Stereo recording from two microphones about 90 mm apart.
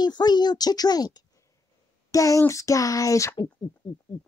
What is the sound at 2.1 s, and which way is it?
Speech, 40° left (ahead or behind).